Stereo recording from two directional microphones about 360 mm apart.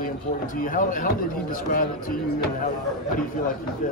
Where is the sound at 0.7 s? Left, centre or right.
Left.